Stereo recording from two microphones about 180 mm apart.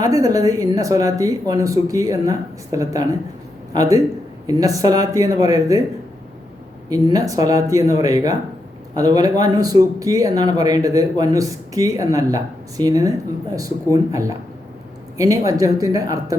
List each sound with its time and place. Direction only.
0.0 s a man's voice: 20° right (ahead or behind)
6.9 s a man's voice: 20° right (ahead or behind)